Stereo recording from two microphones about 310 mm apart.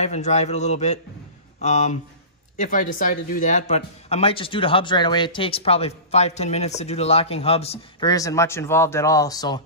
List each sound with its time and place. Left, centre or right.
0.0 s a man's voice: left